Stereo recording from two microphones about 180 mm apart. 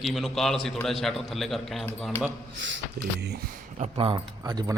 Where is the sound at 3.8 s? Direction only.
30° right (ahead or behind).